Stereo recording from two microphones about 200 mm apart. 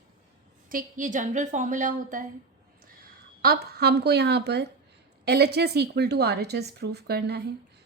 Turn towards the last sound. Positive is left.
turn(degrees=-55)  # may be behind; listen again after turning